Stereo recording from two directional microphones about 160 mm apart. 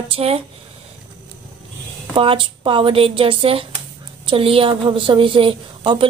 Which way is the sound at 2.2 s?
35° right (ahead or behind).